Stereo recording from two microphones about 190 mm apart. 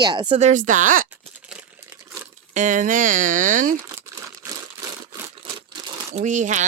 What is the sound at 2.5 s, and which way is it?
Speech, 40° right (ahead or behind).